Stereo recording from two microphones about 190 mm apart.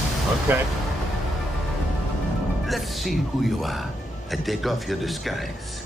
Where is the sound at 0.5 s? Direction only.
10° right (ahead or behind).